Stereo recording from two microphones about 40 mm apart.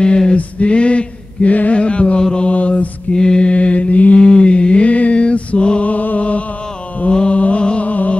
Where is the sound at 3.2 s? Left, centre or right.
Left.